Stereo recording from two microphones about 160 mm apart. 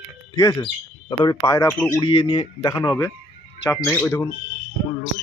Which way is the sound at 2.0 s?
35° left (ahead or behind).